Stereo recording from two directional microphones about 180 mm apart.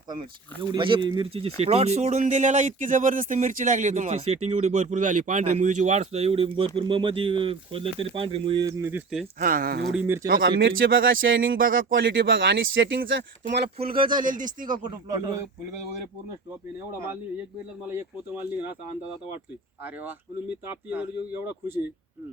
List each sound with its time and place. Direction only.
0.7 s speech: 25° right (ahead or behind)
8.8 s speech: 10° right (ahead or behind)
9.4 s speech: 50° right (ahead or behind)
9.9 s speech: 10° right (ahead or behind)
10.4 s speech: 90° right; by 10.9 s 75° right (ahead or behind)
11.0 s speech: 90° right
14.3 s speech: 45° right (ahead or behind)
14.8 s speech: 20° right (ahead or behind)
17.8 s speech: 15° right (ahead or behind)
20.9 s speech: 10° right (ahead or behind)